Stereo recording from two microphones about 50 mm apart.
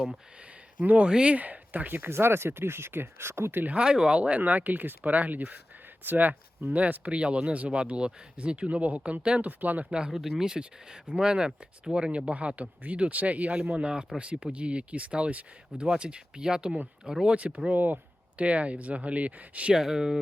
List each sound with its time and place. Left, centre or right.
0.8 s speech: right
2.0 s speech: right
3.8 s speech: centre
4.2 s speech: right
10.1 s speech: centre
17.3 s speech: right
17.7 s speech: right
18.4 s speech: right
19.7 s speech: centre